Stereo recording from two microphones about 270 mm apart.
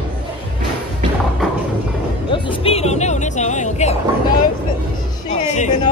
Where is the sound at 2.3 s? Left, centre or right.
Centre.